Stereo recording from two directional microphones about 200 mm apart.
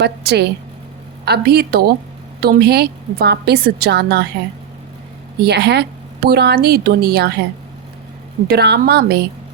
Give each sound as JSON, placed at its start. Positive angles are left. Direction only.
{"t": 0.0, "sound": "a woman's voice", "side_deg": -55}
{"t": 5.4, "sound": "a woman's voice", "side_deg": -55}
{"t": 8.4, "sound": "a woman's voice", "side_deg": -55}